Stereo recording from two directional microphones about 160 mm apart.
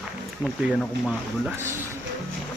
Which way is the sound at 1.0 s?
15° right (ahead or behind).